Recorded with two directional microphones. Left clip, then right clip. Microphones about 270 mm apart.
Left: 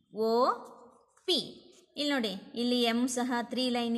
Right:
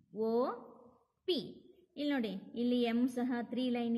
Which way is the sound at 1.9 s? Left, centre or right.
Left.